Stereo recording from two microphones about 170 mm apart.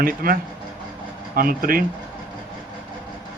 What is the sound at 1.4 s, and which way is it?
Speech, 60° right (ahead or behind).